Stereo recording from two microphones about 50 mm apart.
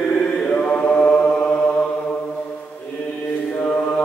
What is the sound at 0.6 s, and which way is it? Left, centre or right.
Mantra, left.